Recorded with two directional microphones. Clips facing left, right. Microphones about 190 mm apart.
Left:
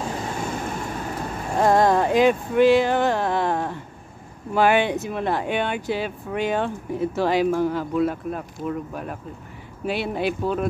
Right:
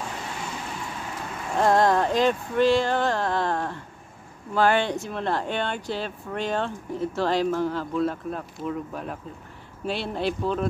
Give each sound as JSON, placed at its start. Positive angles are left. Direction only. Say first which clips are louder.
{"t": 0.4, "sound": "vehicle", "louder": "left 6 dB", "side_deg": 50}
{"t": 1.6, "sound": "speech", "louder": "left 2 dB", "side_deg": 10}